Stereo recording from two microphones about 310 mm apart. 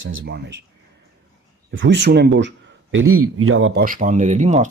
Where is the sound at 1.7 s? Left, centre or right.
Right.